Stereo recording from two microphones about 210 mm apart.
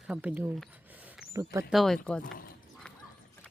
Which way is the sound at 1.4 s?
15° right (ahead or behind).